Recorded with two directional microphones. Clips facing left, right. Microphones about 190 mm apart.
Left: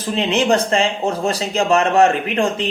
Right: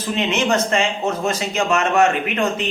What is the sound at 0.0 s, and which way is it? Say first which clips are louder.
Speech: left 2 dB; 35° left (ahead or behind).